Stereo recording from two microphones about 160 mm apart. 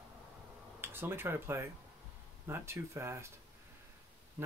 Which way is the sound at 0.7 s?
15° right (ahead or behind).